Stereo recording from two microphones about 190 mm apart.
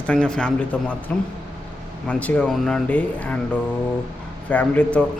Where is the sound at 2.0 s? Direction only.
5° left (ahead or behind).